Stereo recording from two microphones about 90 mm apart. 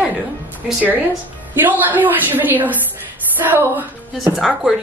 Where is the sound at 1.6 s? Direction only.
20° right (ahead or behind).